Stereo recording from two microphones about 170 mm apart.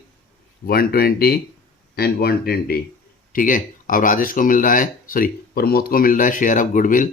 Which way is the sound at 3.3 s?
55° left (ahead or behind).